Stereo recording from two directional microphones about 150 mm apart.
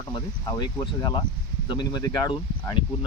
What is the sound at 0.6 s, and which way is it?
Speech, 30° left (ahead or behind).